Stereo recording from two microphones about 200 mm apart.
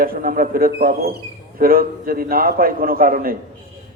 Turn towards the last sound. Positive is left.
turn(degrees=-45)  # may be behind; listen again after turning